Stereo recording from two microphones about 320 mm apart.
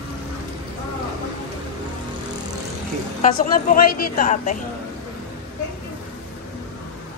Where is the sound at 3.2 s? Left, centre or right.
Left.